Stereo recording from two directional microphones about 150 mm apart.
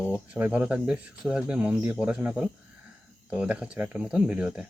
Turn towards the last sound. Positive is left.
turn(degrees=-5)  # may be behind; listen again after turning